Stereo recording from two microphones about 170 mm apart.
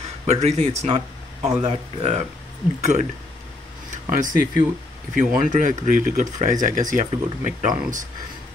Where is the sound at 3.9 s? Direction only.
50° right (ahead or behind).